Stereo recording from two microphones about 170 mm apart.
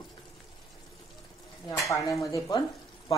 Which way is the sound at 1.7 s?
20° left (ahead or behind).